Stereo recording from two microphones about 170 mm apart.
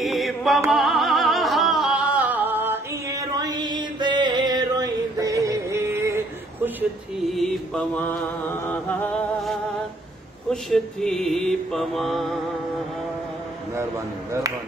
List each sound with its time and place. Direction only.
0.0 s music: centre (ahead or behind)
7.2 s mantra: centre (ahead or behind)
13.7 s speech: 15° right (ahead or behind)